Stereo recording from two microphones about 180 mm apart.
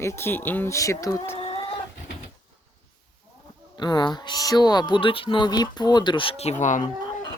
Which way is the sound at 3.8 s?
25° left (ahead or behind).